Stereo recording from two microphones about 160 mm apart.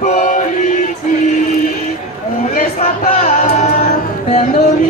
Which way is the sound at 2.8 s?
40° left (ahead or behind).